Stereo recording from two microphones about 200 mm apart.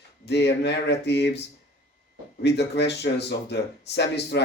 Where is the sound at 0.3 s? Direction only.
60° left (ahead or behind).